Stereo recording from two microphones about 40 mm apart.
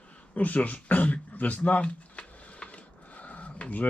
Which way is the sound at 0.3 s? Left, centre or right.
Left.